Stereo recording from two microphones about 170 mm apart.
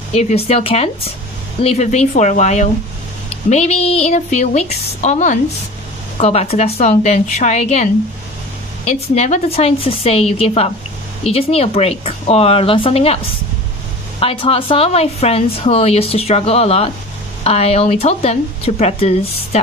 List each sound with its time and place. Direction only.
0.1 s a woman's voice: 40° left (ahead or behind)
14.2 s a woman's voice: 30° left (ahead or behind)